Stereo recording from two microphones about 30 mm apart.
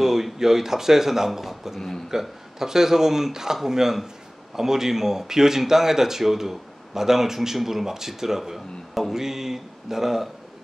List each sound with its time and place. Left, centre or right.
0.0 s speech: centre